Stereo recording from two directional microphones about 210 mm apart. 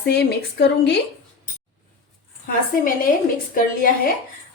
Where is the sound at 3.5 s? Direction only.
40° left (ahead or behind).